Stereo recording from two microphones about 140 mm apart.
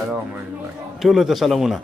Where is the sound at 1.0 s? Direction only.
Centre (ahead or behind).